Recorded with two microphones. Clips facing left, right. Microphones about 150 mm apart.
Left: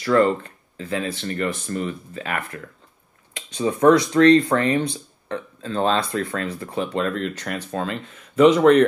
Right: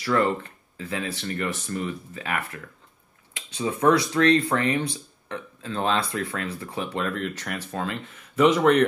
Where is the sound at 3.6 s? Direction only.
30° left (ahead or behind).